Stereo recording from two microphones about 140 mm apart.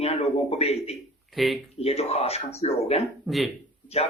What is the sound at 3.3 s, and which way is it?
Speech, centre (ahead or behind).